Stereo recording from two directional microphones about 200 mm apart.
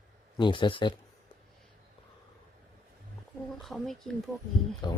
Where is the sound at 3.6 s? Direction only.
Centre (ahead or behind).